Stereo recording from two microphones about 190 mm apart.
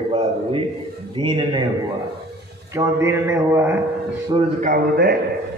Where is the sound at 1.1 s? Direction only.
25° right (ahead or behind).